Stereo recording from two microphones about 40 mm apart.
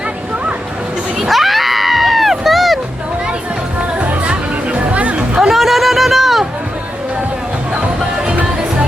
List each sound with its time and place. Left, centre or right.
1.2 s crowd: centre
3.8 s music: right
5.4 s a sound: centre